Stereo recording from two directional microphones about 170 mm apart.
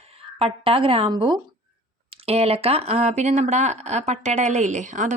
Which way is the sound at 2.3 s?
35° right (ahead or behind).